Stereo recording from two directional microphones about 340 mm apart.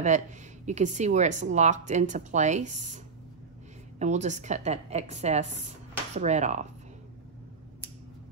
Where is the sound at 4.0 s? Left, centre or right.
Right.